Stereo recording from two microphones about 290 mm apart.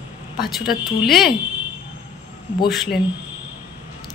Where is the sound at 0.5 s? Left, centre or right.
Centre.